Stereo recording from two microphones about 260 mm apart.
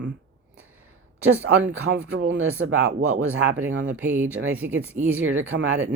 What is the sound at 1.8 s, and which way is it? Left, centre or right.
Speech, right.